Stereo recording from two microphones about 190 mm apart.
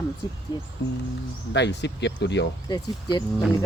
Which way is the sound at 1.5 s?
65° left (ahead or behind).